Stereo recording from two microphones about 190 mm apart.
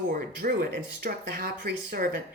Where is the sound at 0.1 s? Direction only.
45° right (ahead or behind).